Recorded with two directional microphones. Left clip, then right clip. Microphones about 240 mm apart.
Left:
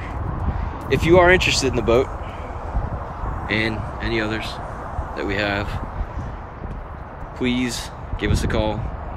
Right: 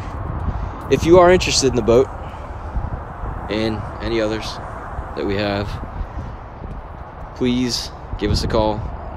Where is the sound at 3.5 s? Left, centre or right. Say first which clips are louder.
Even; centre.